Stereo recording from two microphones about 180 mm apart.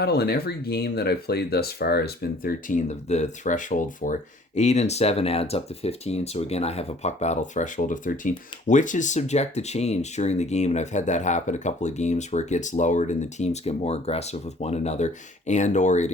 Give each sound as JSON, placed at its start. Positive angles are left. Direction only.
{"t": 0.0, "sound": "speech", "side_deg": 65}